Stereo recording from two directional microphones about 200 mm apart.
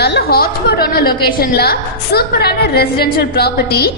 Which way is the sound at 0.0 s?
55° left (ahead or behind).